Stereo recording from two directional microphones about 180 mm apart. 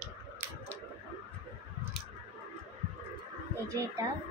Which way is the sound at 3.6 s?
15° right (ahead or behind).